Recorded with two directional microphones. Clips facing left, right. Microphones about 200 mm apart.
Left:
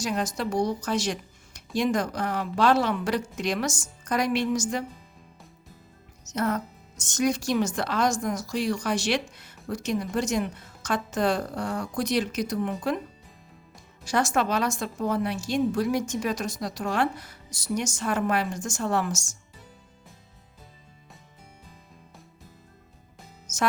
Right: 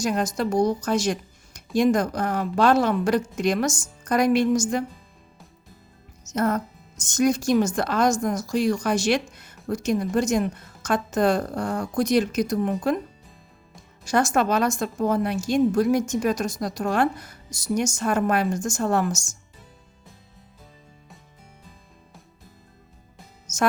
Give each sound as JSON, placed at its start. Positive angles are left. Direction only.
{"t": 0.0, "sound": "speech", "side_deg": -45}
{"t": 6.2, "sound": "a woman's voice", "side_deg": -45}
{"t": 14.0, "sound": "speech", "side_deg": -45}